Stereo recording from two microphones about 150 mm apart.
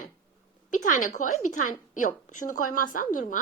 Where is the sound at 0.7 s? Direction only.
60° left (ahead or behind).